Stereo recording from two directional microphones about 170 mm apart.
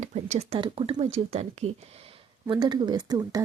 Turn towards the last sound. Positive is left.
turn(degrees=-25)  # may be behind; listen again after turning